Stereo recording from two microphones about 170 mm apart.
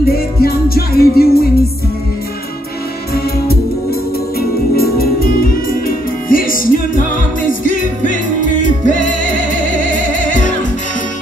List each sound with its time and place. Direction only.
0.1 s music: 65° left (ahead or behind)
4.4 s music: 65° left (ahead or behind); by 10.5 s 50° left (ahead or behind)